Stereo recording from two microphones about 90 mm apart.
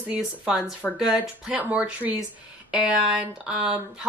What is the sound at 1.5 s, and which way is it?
Speech, 15° right (ahead or behind).